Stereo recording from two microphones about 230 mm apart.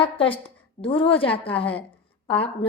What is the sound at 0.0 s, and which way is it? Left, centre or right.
A woman's voice, left.